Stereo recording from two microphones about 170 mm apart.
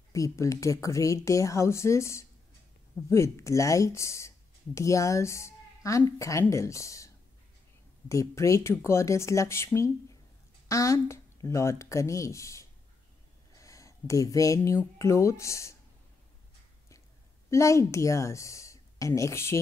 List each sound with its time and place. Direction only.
0.1 s speech: 20° left (ahead or behind)
8.1 s speech: 20° left (ahead or behind)
13.6 s a sound: 20° left (ahead or behind)
15.0 s speech: 15° left (ahead or behind)
17.5 s a woman's voice: 15° left (ahead or behind)